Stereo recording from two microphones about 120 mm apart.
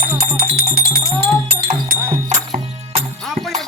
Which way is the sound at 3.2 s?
Centre (ahead or behind).